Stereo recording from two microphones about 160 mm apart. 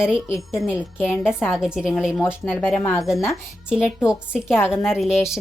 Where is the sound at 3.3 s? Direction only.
5° right (ahead or behind).